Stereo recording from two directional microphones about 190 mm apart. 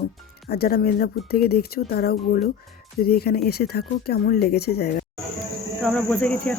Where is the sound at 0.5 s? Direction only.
50° left (ahead or behind).